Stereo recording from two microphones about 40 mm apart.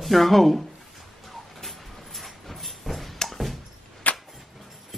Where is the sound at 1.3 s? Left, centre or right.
Centre.